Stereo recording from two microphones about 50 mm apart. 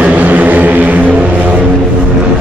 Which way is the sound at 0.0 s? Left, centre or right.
Right.